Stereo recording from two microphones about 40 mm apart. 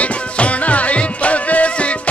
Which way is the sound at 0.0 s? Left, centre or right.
Left.